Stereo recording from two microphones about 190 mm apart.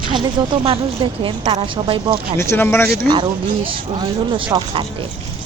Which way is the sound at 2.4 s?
15° left (ahead or behind).